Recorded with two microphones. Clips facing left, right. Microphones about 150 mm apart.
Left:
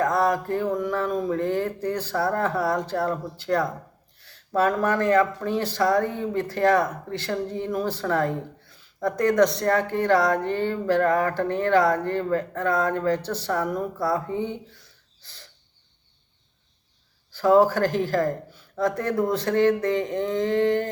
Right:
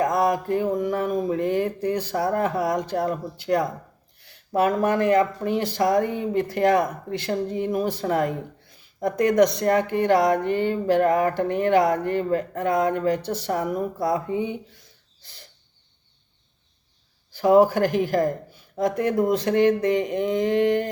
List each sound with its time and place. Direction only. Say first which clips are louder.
0.0 s mantra: right 1 dB; 15° right (ahead or behind)
0.8 s speech: right 2 dB; 15° right (ahead or behind)
17.3 s speech: right 1 dB; 15° right (ahead or behind)